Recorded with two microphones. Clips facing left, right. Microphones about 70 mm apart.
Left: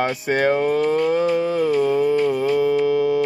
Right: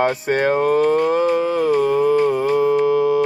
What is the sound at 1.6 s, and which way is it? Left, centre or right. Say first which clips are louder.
Music: right 2 dB; right.